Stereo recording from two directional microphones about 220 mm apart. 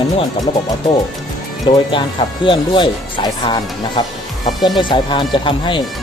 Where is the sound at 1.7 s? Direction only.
20° left (ahead or behind).